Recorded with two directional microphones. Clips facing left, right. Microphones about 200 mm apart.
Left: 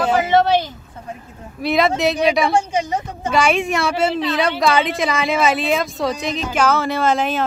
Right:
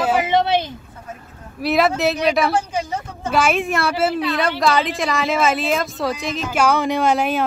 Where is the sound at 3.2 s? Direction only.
5° right (ahead or behind).